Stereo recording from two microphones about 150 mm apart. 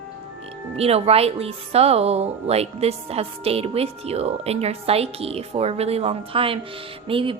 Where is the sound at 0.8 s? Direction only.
45° right (ahead or behind).